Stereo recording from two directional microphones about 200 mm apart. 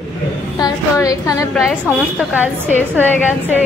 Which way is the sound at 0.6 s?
20° left (ahead or behind).